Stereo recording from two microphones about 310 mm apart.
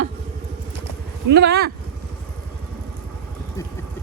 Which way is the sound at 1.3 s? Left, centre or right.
Right.